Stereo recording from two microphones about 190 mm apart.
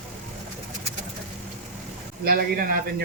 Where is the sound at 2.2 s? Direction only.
50° right (ahead or behind).